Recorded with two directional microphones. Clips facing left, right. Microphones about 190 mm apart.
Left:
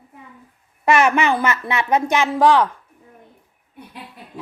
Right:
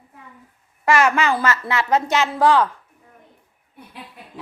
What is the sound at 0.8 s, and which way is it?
Speech, 20° left (ahead or behind).